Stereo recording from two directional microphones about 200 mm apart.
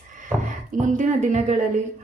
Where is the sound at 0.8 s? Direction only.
40° right (ahead or behind).